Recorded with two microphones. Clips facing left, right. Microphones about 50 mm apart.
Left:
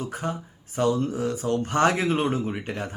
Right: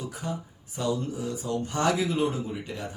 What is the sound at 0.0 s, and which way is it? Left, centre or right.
Speech, left.